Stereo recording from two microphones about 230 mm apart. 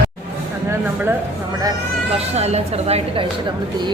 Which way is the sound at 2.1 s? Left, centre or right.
Right.